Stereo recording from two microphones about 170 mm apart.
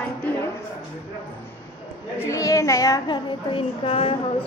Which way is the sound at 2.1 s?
15° left (ahead or behind).